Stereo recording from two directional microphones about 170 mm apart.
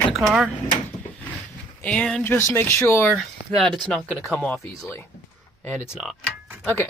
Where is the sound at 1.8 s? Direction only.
5° left (ahead or behind).